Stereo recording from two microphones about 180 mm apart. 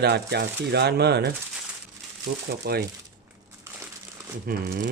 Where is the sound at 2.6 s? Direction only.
60° right (ahead or behind).